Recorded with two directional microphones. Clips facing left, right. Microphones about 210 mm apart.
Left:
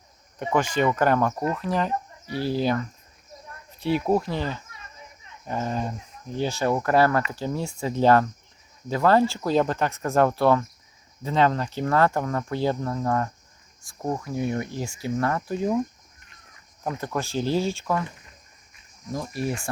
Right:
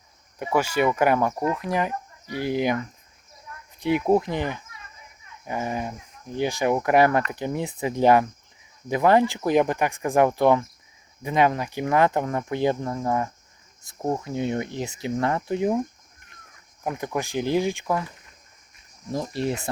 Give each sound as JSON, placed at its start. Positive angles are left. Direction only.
{"t": 0.3, "sound": "speech", "side_deg": -10}
{"t": 3.8, "sound": "speech", "side_deg": -15}
{"t": 13.8, "sound": "speech", "side_deg": -25}
{"t": 16.8, "sound": "speech", "side_deg": -15}
{"t": 19.1, "sound": "speech", "side_deg": -25}